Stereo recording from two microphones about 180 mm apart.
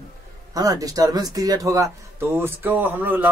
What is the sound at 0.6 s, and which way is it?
Speech, 20° right (ahead or behind).